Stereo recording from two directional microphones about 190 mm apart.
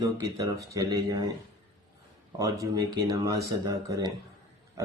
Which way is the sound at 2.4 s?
20° right (ahead or behind).